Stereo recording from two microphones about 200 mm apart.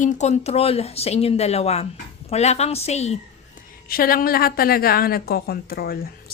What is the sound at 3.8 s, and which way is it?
A woman's voice, 45° left (ahead or behind).